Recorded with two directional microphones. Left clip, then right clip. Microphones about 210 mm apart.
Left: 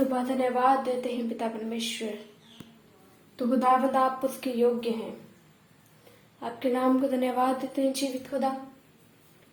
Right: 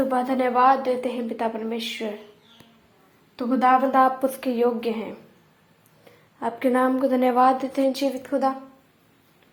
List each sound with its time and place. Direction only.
0.1 s a woman's voice: 20° right (ahead or behind)
3.3 s a woman's voice: 20° right (ahead or behind)
6.4 s a woman's voice: 25° right (ahead or behind)
8.3 s a woman's voice: 30° right (ahead or behind)